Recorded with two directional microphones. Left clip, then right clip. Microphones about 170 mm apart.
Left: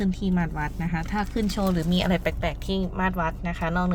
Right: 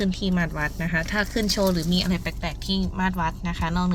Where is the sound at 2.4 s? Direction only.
20° left (ahead or behind).